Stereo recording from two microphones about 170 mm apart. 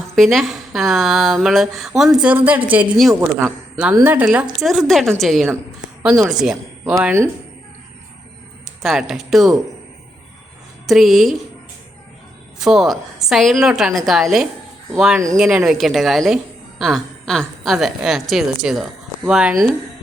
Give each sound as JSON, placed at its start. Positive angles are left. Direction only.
{"t": 0.2, "sound": "a woman's voice", "side_deg": 0}
{"t": 7.0, "sound": "a woman's voice", "side_deg": -15}
{"t": 8.8, "sound": "a woman's voice", "side_deg": 0}
{"t": 10.8, "sound": "a woman's voice", "side_deg": 0}
{"t": 12.5, "sound": "a woman's voice", "side_deg": 0}